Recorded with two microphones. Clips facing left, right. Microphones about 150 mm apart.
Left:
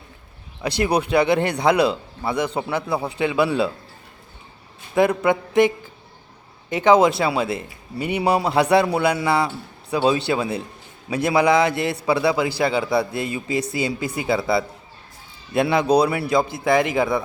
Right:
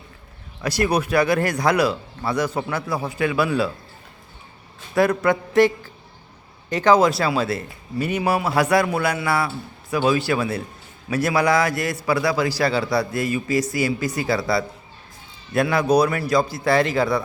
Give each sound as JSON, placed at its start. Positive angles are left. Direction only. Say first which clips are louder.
{"t": 0.6, "sound": "a man's voice", "louder": "even", "side_deg": 15}
{"t": 2.9, "sound": "a man's voice", "louder": "even", "side_deg": 25}
{"t": 4.9, "sound": "a man's voice", "louder": "left 1 dB", "side_deg": 20}
{"t": 6.8, "sound": "a man's voice", "louder": "left 1 dB", "side_deg": 20}